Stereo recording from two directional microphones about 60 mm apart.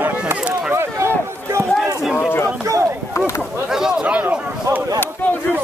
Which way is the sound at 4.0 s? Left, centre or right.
Right.